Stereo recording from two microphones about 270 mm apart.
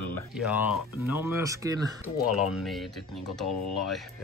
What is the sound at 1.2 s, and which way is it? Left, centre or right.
Speech, centre.